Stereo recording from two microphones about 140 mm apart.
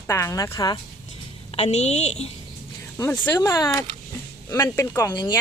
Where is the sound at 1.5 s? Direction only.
50° left (ahead or behind).